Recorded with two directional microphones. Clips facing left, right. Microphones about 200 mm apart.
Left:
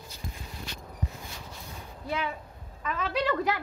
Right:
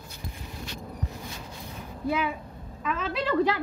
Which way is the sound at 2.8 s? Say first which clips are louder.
Even; centre (ahead or behind).